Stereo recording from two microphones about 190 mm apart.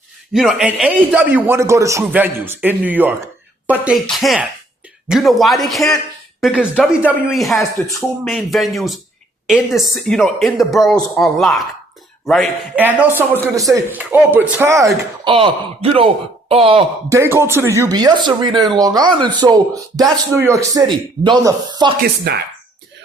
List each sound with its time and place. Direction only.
0.3 s a man's voice: 5° right (ahead or behind)
12.8 s a man's voice: 10° right (ahead or behind)
15.3 s speech: 30° right (ahead or behind)
17.1 s speech: 15° right (ahead or behind)
22.0 s speech: 55° right (ahead or behind)